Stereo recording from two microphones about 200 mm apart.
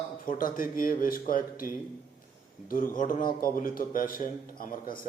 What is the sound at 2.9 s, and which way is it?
Speech, 45° left (ahead or behind).